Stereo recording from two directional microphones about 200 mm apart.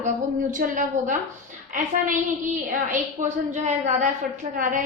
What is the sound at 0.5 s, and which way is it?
A woman's voice, 40° right (ahead or behind).